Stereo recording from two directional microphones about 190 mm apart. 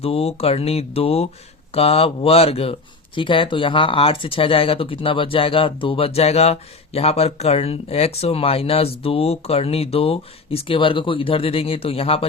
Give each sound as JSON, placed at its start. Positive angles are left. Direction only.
{"t": 0.0, "sound": "speech", "side_deg": 30}